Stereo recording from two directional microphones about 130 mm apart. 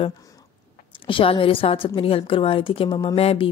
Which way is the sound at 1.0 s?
40° left (ahead or behind).